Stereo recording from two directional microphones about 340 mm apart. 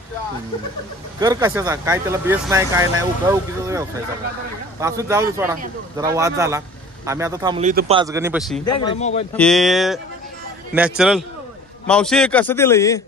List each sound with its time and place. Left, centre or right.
1.2 s speech: centre
8.8 s speech: centre
9.4 s a man's voice: centre